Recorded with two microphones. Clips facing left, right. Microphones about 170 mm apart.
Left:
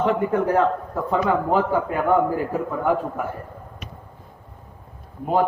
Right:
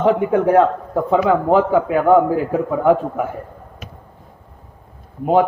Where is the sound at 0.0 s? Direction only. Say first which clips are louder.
Right 5 dB; 85° right.